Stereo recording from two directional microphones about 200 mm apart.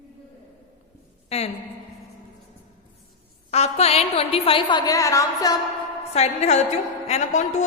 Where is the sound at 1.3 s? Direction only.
30° left (ahead or behind).